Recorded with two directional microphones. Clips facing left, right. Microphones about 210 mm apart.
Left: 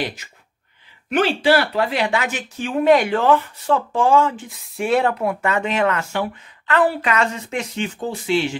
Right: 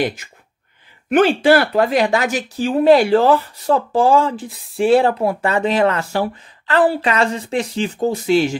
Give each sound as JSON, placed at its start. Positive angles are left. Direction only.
{"t": 0.0, "sound": "speech", "side_deg": -50}